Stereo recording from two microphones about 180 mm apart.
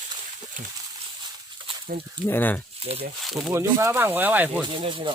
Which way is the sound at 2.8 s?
35° right (ahead or behind).